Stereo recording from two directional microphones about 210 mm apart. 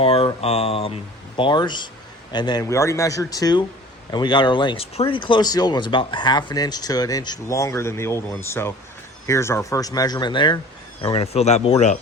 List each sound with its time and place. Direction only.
0.0 s speech: 25° left (ahead or behind)